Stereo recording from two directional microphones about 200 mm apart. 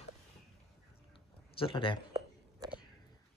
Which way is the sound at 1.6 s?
25° left (ahead or behind).